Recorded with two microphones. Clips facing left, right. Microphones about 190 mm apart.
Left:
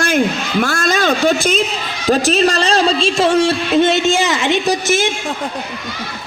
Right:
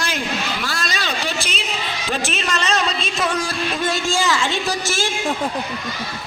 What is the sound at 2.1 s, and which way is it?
Music, 35° left (ahead or behind).